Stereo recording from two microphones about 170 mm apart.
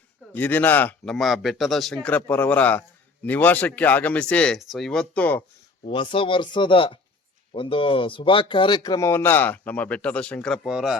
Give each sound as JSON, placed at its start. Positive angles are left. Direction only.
{"t": 0.3, "sound": "speech", "side_deg": 10}
{"t": 5.8, "sound": "speech", "side_deg": 30}